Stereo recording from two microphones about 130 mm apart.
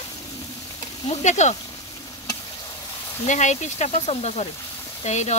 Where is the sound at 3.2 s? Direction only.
65° left (ahead or behind).